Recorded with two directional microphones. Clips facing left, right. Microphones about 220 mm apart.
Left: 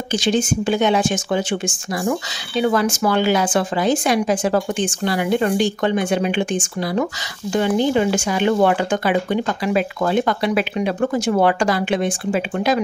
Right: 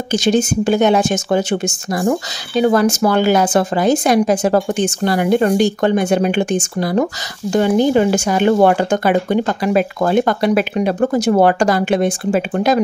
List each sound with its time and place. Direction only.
0.1 s speech: 45° right (ahead or behind)